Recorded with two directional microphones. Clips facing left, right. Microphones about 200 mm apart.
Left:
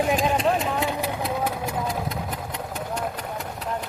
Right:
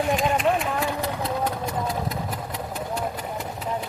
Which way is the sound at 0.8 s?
15° left (ahead or behind).